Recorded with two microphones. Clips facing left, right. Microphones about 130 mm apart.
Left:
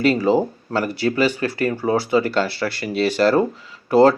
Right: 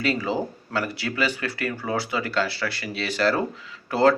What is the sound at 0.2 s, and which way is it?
Speech, 35° left (ahead or behind).